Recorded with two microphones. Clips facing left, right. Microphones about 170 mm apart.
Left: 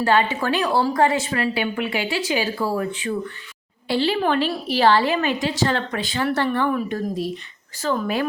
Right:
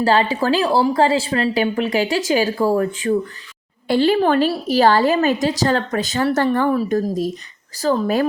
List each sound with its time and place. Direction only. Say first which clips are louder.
0.0 s a woman's voice: right 3 dB; 35° right (ahead or behind)